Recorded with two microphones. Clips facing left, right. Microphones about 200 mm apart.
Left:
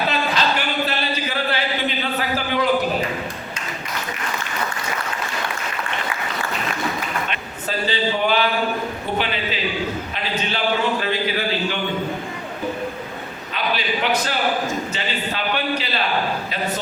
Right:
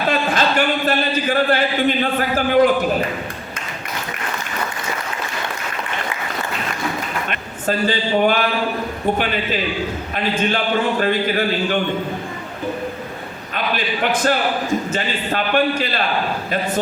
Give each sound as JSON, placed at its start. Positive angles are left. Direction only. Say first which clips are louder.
{"t": 0.1, "sound": "a sound", "louder": "right 3 dB", "side_deg": -50}
{"t": 7.9, "sound": "a man's voice", "louder": "right 3 dB", "side_deg": -50}
{"t": 11.0, "sound": "a man's voice", "louder": "right 4 dB", "side_deg": -50}
{"t": 13.7, "sound": "a man's voice", "louder": "right 1 dB", "side_deg": -50}